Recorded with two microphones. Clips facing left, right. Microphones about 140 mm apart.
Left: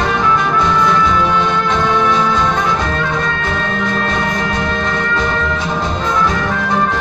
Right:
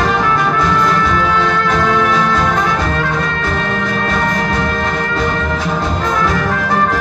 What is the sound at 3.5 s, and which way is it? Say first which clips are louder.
Music: even; 45° right (ahead or behind).